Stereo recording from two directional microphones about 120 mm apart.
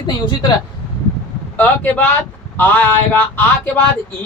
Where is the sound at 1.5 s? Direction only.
10° left (ahead or behind).